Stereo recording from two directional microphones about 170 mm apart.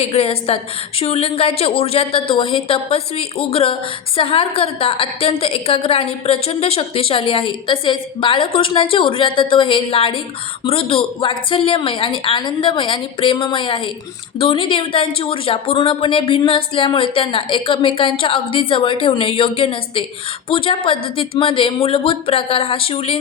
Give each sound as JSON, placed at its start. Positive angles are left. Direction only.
{"t": 0.0, "sound": "a woman's voice", "side_deg": 35}